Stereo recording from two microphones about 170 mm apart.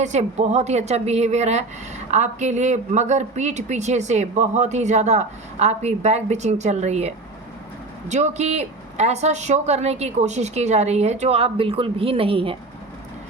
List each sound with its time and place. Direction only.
0.0 s speech: 40° right (ahead or behind)